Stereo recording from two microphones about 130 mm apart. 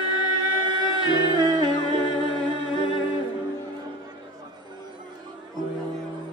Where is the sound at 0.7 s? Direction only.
35° right (ahead or behind).